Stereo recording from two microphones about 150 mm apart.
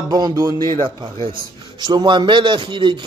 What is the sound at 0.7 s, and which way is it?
A man's voice, 35° right (ahead or behind).